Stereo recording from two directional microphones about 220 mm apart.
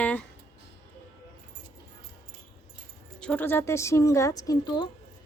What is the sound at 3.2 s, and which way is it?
A woman's voice, 5° left (ahead or behind).